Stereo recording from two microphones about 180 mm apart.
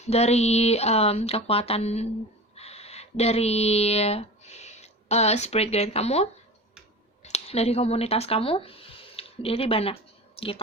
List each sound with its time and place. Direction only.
0.0 s speech: 35° left (ahead or behind)
2.6 s a sound: 35° left (ahead or behind)
5.7 s speech: 35° left (ahead or behind)